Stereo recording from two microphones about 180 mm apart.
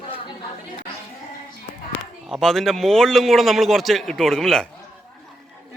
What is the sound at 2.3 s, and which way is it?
A man's voice, centre (ahead or behind).